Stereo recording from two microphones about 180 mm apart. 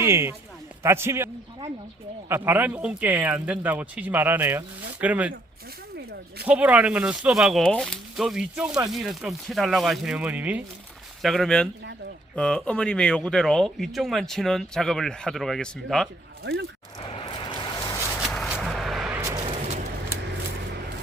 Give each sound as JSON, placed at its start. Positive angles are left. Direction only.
{"t": 0.0, "sound": "speech", "side_deg": -15}
{"t": 2.3, "sound": "speech", "side_deg": -10}
{"t": 6.4, "sound": "speech", "side_deg": -10}
{"t": 16.4, "sound": "speech", "side_deg": -65}
{"t": 17.5, "sound": "vehicle", "side_deg": 25}
{"t": 18.2, "sound": "a sound", "side_deg": 0}